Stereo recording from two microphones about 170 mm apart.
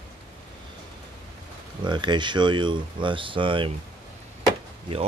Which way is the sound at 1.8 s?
25° right (ahead or behind).